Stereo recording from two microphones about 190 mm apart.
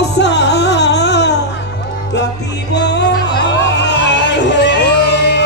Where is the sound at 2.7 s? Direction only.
65° left (ahead or behind).